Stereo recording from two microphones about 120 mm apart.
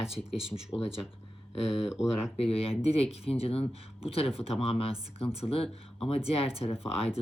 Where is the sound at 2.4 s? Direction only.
55° left (ahead or behind).